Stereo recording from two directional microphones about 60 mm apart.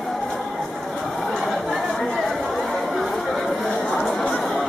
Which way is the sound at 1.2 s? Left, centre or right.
Centre.